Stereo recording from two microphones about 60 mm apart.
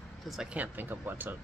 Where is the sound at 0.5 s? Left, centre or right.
Right.